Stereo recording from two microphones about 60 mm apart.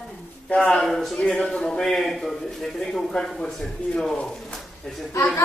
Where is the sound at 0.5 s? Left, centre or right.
Centre.